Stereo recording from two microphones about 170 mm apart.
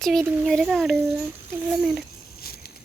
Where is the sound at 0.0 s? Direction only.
Centre (ahead or behind).